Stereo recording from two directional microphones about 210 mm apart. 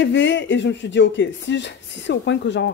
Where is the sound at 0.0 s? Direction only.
60° left (ahead or behind).